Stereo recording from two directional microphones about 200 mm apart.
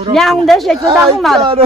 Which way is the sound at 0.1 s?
Centre (ahead or behind).